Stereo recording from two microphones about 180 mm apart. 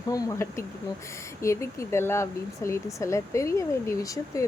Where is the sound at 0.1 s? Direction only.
20° left (ahead or behind).